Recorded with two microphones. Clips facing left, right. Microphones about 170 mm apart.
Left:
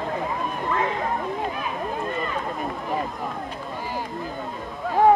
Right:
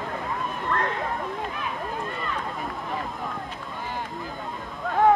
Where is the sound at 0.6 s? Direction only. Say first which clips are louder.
Left 2 dB; 5° left (ahead or behind).